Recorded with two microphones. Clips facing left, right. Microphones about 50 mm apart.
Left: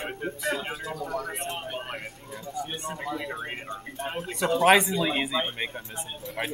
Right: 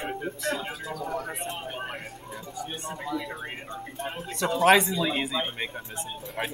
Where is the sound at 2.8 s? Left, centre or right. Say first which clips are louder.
Even; left.